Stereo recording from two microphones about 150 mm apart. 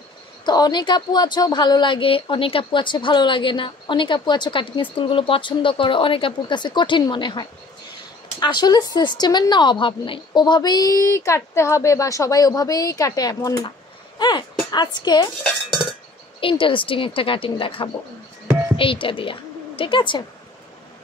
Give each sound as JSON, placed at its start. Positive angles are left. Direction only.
{"t": 0.5, "sound": "a woman's voice", "side_deg": 30}
{"t": 15.4, "sound": "dishes", "side_deg": 0}
{"t": 16.3, "sound": "a woman's voice", "side_deg": 35}